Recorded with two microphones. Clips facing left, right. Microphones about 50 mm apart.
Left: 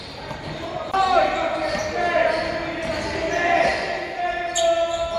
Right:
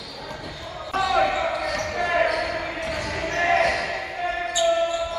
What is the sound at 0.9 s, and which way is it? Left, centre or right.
Basketball bounce, centre.